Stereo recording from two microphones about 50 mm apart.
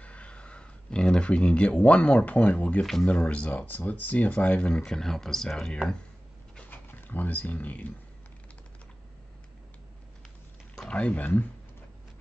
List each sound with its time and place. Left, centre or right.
0.0 s speech: left
2.8 s speech: centre
3.1 s speech: left; by 5.8 s centre
6.7 s speech: left
10.9 s speech: left